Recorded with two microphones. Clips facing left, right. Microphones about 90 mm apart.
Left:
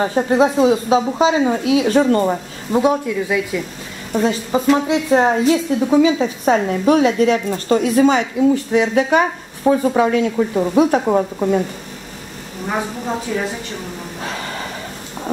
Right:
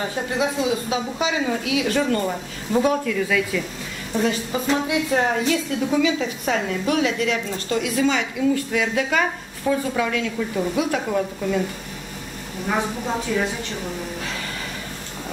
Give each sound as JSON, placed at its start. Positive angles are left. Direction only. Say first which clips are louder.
{"t": 0.0, "sound": "a woman's voice", "louder": "left 9 dB", "side_deg": 35}
{"t": 2.8, "sound": "speech", "louder": "left 4 dB", "side_deg": 20}
{"t": 4.1, "sound": "a woman's voice", "louder": "left 5 dB", "side_deg": 30}
{"t": 8.7, "sound": "a woman's voice", "louder": "left 7 dB", "side_deg": 25}